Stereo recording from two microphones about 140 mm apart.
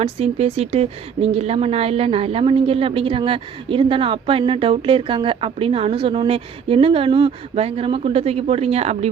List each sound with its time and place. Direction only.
0.0 s speech: 45° right (ahead or behind)